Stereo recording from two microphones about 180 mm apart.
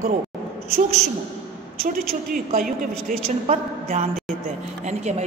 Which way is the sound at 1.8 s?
55° right (ahead or behind).